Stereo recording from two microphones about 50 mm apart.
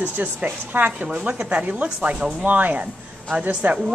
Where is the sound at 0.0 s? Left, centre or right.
Right.